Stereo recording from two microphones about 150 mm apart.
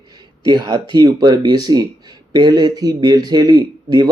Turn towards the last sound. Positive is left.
turn(degrees=-25)  # may be behind; listen again after turning